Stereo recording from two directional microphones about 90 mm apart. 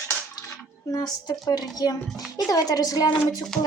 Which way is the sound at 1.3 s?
45° left (ahead or behind).